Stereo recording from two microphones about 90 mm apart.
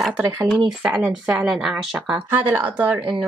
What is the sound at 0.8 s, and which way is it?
Speech, 15° right (ahead or behind).